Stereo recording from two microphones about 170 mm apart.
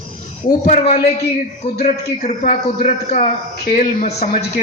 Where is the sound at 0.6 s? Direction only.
40° left (ahead or behind).